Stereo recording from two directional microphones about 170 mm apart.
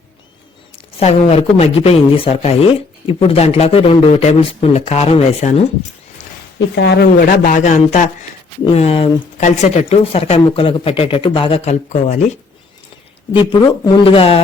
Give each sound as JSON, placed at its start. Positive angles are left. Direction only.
{"t": 0.9, "sound": "speech", "side_deg": 35}
{"t": 6.7, "sound": "speech", "side_deg": 85}
{"t": 7.2, "sound": "speech", "side_deg": 55}
{"t": 13.3, "sound": "speech", "side_deg": 25}